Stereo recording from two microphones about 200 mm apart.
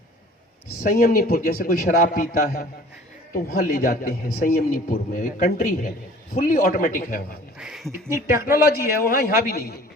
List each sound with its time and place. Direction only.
0.8 s a man's voice: 45° left (ahead or behind)
7.6 s speech: centre (ahead or behind)
8.1 s a woman's voice: 15° right (ahead or behind)
8.6 s a man's voice: 50° left (ahead or behind)